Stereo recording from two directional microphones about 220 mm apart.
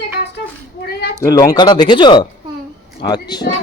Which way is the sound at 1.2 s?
15° left (ahead or behind).